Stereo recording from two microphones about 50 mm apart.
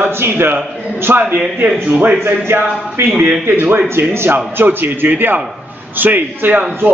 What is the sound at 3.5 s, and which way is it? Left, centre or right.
Speech, right.